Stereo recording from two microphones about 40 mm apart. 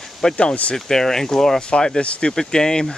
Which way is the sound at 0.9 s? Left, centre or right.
Centre.